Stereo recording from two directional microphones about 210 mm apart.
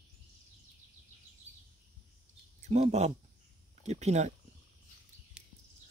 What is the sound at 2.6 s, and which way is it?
Speech, 30° right (ahead or behind).